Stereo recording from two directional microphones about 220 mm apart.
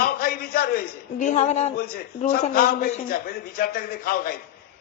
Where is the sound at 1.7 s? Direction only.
40° left (ahead or behind).